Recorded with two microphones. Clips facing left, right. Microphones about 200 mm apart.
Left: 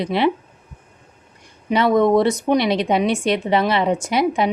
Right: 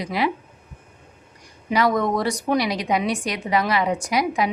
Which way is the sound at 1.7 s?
25° left (ahead or behind).